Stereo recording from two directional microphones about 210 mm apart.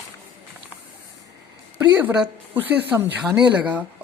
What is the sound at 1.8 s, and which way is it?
A woman's voice, 10° right (ahead or behind).